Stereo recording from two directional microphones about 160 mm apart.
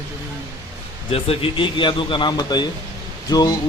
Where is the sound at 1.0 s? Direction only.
35° left (ahead or behind).